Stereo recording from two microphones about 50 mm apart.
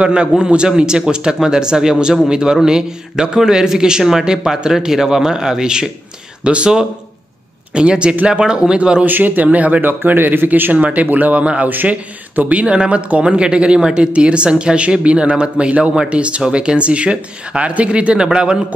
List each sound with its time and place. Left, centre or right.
0.0 s speech: centre
9.0 s speech: right
11.7 s speech: right; by 18.6 s centre